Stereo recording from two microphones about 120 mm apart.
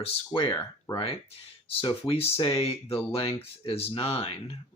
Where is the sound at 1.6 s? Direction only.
50° left (ahead or behind).